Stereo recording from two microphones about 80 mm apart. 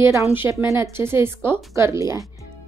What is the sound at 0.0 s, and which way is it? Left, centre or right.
A woman's voice, right.